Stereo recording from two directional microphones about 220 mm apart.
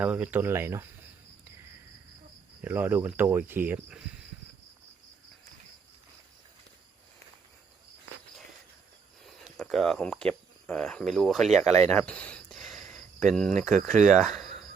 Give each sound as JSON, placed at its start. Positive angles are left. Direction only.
{"t": 0.0, "sound": "speech", "side_deg": -5}
{"t": 2.6, "sound": "speech", "side_deg": -10}
{"t": 9.2, "sound": "speech", "side_deg": 0}
{"t": 11.7, "sound": "cricket", "side_deg": 5}
{"t": 13.7, "sound": "speech", "side_deg": -35}
{"t": 14.2, "sound": "cricket", "side_deg": 0}